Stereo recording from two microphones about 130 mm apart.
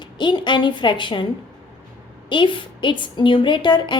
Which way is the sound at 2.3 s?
40° left (ahead or behind).